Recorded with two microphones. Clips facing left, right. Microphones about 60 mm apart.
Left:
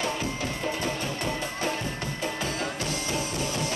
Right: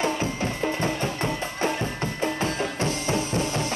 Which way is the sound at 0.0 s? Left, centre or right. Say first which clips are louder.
Right 4 dB; right.